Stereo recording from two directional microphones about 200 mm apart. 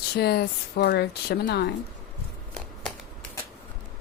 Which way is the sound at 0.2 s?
55° left (ahead or behind).